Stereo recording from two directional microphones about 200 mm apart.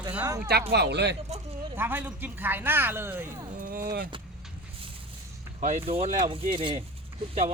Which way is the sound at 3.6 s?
45° right (ahead or behind).